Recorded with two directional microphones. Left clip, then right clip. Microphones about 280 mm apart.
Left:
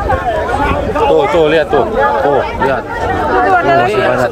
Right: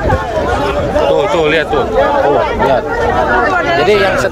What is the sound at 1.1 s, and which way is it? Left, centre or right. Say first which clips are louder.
Speech: left 5 dB; left.